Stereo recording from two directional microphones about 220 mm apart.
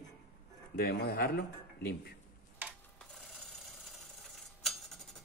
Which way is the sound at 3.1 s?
Centre (ahead or behind).